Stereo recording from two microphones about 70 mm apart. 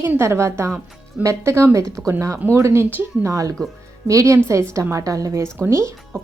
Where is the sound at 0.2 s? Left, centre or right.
Right.